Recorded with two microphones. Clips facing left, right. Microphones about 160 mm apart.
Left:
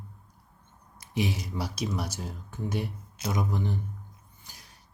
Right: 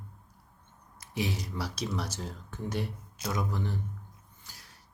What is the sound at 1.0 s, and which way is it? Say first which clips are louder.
Speech: left 3 dB; 15° left (ahead or behind).